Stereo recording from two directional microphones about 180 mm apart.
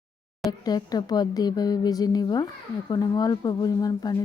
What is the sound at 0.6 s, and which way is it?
A woman's voice, 20° left (ahead or behind).